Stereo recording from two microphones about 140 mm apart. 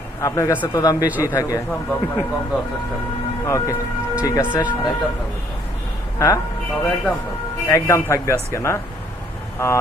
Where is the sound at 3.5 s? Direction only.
25° left (ahead or behind).